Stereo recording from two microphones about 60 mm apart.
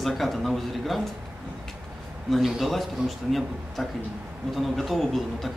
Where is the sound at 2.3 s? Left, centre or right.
Centre.